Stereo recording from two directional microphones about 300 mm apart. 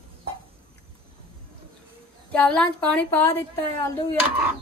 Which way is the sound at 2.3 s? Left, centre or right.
Centre.